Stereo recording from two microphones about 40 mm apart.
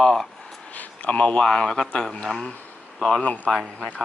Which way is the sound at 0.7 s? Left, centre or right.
Left.